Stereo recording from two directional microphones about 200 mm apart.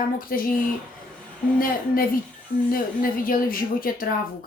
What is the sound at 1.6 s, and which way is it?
Speech, 45° left (ahead or behind).